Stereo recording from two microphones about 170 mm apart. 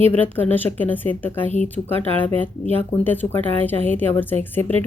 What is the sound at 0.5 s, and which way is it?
A woman's voice, 10° left (ahead or behind).